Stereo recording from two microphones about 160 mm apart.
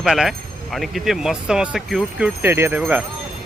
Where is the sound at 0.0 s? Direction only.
Centre (ahead or behind).